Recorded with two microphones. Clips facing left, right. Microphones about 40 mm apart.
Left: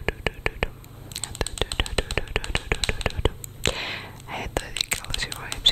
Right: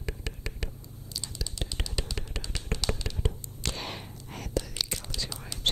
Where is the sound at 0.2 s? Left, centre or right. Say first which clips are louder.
Left 12 dB; left.